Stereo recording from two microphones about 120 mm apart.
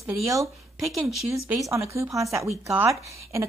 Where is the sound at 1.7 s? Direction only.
25° right (ahead or behind).